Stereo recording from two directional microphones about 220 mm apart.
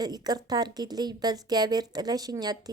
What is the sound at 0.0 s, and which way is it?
A woman's voice, 15° right (ahead or behind).